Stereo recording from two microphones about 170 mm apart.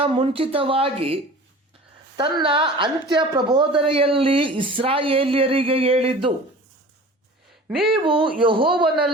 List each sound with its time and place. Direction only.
0.0 s a woman's voice: 30° right (ahead or behind)
7.7 s a man's voice: 5° right (ahead or behind)
7.9 s a woman's voice: 30° right (ahead or behind)
8.7 s a man's voice: 5° right (ahead or behind)